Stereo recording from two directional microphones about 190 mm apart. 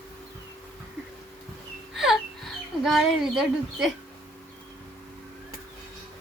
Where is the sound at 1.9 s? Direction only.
Centre (ahead or behind).